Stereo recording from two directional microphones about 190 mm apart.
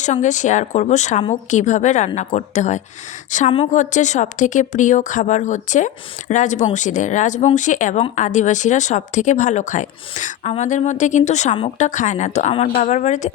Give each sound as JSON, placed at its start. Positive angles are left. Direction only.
{"t": 0.0, "sound": "speech", "side_deg": 40}